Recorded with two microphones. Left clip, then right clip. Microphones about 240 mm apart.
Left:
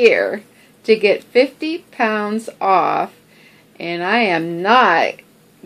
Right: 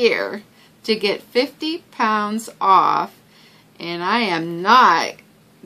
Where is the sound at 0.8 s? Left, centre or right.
Right.